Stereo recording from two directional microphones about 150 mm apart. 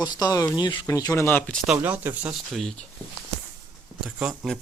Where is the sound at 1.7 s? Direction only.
10° right (ahead or behind).